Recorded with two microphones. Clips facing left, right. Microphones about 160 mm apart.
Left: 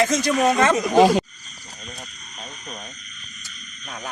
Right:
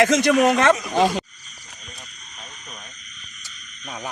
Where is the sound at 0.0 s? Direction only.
70° right (ahead or behind).